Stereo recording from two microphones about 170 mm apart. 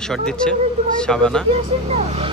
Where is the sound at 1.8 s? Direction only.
35° right (ahead or behind).